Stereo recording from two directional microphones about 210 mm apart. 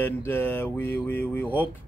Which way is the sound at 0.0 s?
10° left (ahead or behind).